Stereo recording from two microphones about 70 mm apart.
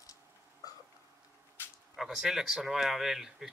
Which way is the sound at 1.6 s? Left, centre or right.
Left.